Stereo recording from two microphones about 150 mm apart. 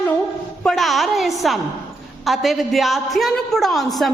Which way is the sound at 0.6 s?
Centre (ahead or behind).